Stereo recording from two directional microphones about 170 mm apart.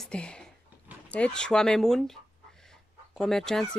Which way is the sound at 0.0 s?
5° left (ahead or behind).